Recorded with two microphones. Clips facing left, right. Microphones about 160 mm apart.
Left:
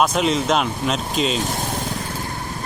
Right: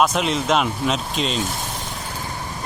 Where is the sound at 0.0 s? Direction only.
Centre (ahead or behind).